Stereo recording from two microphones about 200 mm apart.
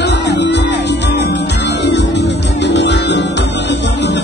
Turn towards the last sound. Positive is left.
turn(degrees=60)  # may be behind; listen again after turning